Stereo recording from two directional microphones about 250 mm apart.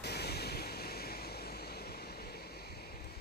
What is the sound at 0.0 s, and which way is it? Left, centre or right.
Waves, left.